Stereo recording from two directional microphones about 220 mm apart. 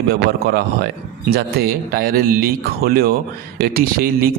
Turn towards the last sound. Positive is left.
turn(degrees=-45)  # may be behind; listen again after turning